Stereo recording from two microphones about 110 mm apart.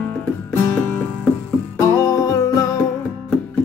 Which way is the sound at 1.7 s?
35° left (ahead or behind).